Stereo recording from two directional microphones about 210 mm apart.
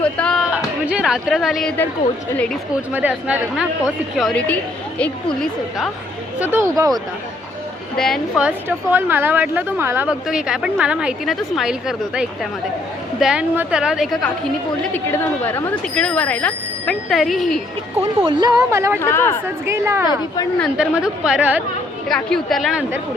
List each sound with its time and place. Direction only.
0.0 s a sound: 5° left (ahead or behind)
2.9 s a woman's voice: 5° right (ahead or behind)
6.4 s speech: 10° right (ahead or behind)
7.9 s a woman's voice: centre (ahead or behind)
18.3 s speech: 20° right (ahead or behind)
18.9 s speech: 10° left (ahead or behind)
19.6 s a woman's voice: 10° right (ahead or behind)